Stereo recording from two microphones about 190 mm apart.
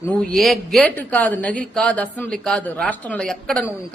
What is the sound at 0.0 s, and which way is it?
A woman's voice, 5° left (ahead or behind).